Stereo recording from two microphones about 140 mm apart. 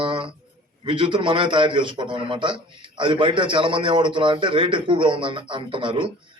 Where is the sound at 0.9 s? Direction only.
35° right (ahead or behind).